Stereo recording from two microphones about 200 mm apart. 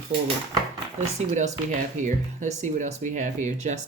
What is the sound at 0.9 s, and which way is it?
Speech, 35° right (ahead or behind).